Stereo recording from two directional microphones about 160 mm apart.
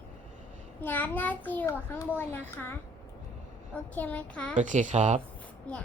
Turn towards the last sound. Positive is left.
turn(degrees=10)  # may be behind; listen again after turning